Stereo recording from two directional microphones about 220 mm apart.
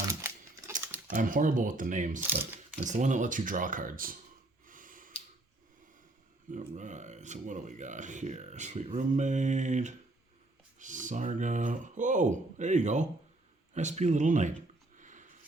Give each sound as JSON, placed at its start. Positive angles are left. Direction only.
{"t": 0.1, "sound": "crumpling", "side_deg": -15}
{"t": 1.1, "sound": "speech", "side_deg": -40}
{"t": 4.6, "sound": "snort", "side_deg": -35}
{"t": 6.5, "sound": "speech", "side_deg": -35}
{"t": 14.9, "sound": "a sound", "side_deg": -35}